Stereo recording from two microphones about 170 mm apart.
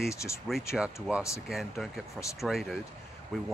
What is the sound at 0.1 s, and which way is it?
Speech, 15° left (ahead or behind).